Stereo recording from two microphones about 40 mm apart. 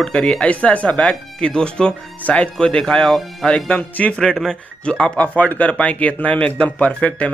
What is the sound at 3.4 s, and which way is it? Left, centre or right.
Speech, left.